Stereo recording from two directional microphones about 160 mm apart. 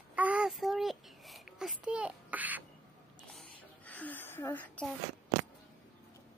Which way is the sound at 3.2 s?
5° left (ahead or behind).